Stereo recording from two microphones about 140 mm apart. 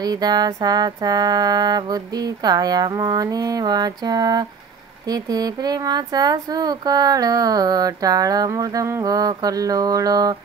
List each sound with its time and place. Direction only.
0.0 s speech: 30° right (ahead or behind)